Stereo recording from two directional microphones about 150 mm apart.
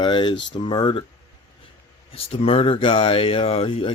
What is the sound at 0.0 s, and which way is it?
Speech, 30° left (ahead or behind).